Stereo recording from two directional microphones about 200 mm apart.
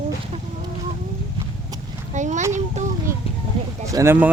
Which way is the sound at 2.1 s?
35° right (ahead or behind).